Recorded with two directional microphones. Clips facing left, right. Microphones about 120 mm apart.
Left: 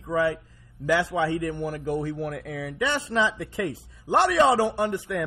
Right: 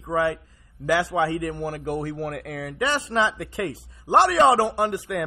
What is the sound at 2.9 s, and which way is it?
Speech, 65° right (ahead or behind).